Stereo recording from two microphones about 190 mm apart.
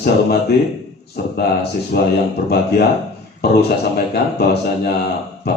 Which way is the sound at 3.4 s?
55° left (ahead or behind).